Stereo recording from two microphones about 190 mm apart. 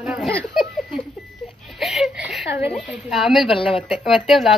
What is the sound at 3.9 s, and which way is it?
Speech, centre (ahead or behind).